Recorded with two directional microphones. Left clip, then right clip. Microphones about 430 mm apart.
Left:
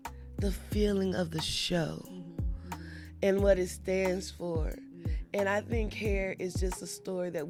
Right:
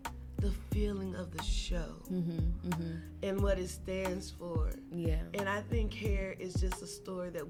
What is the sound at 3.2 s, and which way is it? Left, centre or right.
Music, left.